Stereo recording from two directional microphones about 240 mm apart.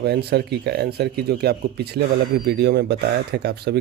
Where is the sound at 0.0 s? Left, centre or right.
Right.